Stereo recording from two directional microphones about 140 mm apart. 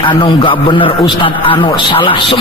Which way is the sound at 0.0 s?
35° left (ahead or behind).